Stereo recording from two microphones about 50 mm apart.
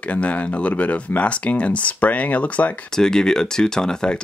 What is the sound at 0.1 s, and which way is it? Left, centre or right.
Speech, left.